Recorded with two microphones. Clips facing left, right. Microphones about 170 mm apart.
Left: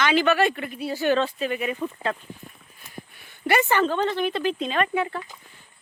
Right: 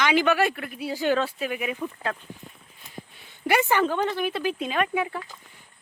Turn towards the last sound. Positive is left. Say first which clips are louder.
# left 1 dB
turn(degrees=-10)  # may be behind; listen again after turning